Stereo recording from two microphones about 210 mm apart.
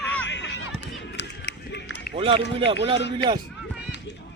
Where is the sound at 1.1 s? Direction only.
55° left (ahead or behind).